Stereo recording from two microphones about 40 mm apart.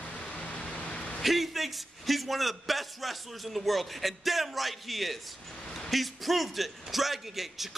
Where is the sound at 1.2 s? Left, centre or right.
Centre.